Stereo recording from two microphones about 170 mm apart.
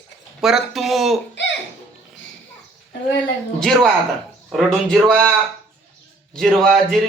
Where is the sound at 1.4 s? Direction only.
90° left.